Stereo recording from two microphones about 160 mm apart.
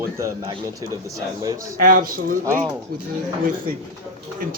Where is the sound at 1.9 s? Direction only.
65° right (ahead or behind).